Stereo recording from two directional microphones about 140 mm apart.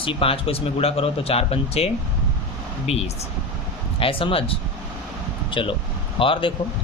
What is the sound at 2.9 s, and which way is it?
A man's voice, 50° left (ahead or behind).